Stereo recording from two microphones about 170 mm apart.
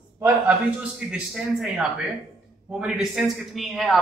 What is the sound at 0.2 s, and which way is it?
A man's voice, 5° right (ahead or behind).